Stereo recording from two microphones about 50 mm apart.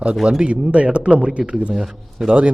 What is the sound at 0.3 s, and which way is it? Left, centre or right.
A man's voice, right.